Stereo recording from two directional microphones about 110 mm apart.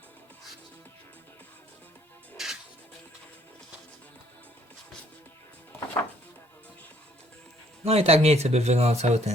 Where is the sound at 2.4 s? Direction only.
5° right (ahead or behind).